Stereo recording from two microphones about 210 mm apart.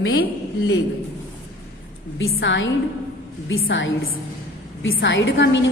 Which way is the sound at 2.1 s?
65° left (ahead or behind).